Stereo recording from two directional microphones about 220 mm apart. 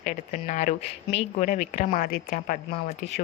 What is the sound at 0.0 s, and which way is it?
Speech, 35° left (ahead or behind).